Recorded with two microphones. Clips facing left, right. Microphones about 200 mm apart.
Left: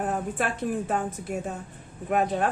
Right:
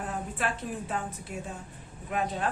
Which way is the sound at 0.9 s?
50° left (ahead or behind).